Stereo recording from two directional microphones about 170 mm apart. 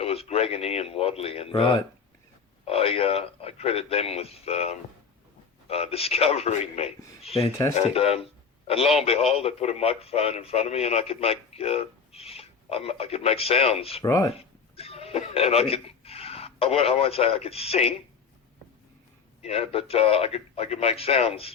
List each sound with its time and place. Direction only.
0.0 s speech: 35° left (ahead or behind)
14.0 s speech: 20° left (ahead or behind)
14.3 s speech: 35° left (ahead or behind)
19.4 s speech: 35° left (ahead or behind)